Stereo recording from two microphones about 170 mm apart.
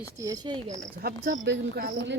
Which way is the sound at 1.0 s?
80° right.